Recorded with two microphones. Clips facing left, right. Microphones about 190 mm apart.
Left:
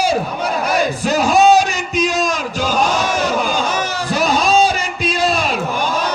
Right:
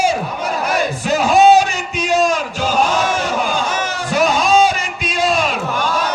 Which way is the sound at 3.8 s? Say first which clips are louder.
Right 1 dB; 35° left (ahead or behind).